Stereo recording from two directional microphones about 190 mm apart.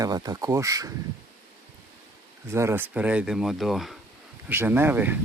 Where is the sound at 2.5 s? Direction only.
15° right (ahead or behind).